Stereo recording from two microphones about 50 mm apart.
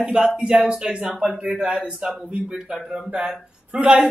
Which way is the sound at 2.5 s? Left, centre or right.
Centre.